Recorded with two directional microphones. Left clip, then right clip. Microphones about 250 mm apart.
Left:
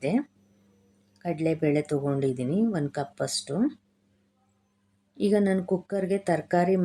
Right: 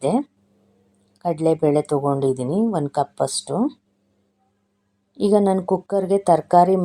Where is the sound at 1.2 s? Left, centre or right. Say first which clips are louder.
Right 8 dB; centre.